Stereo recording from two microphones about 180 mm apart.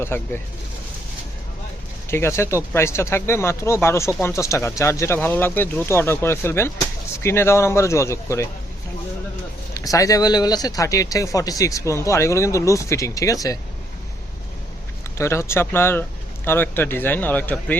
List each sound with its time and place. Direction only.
0.1 s speech: 10° left (ahead or behind)
2.0 s speech: 15° left (ahead or behind)
9.7 s speech: 20° left (ahead or behind)
15.2 s speech: 15° left (ahead or behind)